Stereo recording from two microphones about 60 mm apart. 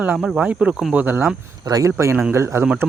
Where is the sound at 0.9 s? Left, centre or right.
Right.